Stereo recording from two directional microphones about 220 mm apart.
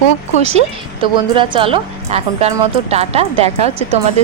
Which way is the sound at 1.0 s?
25° right (ahead or behind).